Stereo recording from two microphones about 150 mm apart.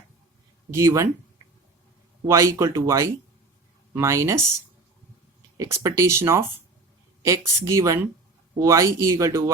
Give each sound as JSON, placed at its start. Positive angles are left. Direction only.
{"t": 0.7, "sound": "speech", "side_deg": -20}
{"t": 2.2, "sound": "speech", "side_deg": -20}
{"t": 5.5, "sound": "speech", "side_deg": -20}